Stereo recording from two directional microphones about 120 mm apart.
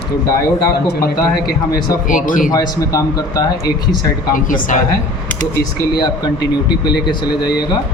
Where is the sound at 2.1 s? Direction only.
90° left.